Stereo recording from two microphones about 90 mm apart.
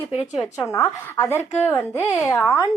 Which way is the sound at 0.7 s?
30° left (ahead or behind).